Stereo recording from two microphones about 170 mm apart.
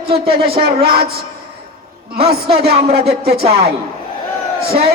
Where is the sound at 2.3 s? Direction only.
70° right (ahead or behind).